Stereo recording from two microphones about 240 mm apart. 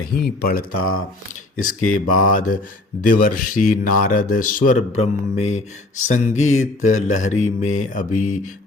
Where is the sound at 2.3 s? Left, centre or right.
Left.